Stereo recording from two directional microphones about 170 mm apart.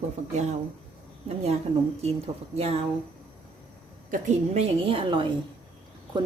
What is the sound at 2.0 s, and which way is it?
Speech, 35° right (ahead or behind).